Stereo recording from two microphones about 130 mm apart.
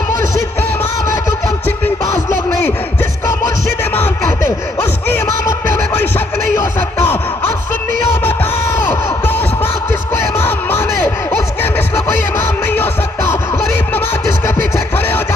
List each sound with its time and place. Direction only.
0.1 s music: 20° left (ahead or behind)
1.6 s music: 20° left (ahead or behind)
8.2 s music: 15° left (ahead or behind)